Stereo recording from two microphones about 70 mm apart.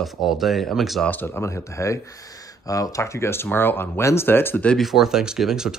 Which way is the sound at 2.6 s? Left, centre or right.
Left.